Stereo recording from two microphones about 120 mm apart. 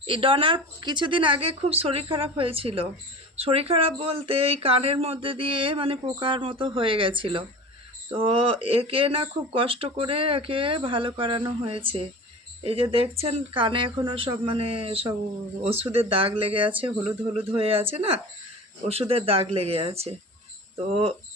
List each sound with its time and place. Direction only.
0.0 s speech: 45° right (ahead or behind)